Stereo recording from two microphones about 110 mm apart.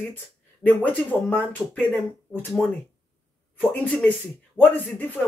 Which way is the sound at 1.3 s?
15° left (ahead or behind).